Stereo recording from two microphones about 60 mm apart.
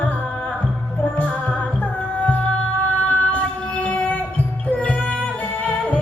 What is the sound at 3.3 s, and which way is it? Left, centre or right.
Music, left.